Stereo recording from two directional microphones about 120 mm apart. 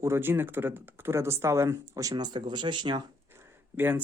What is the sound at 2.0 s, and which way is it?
Speech, 35° right (ahead or behind).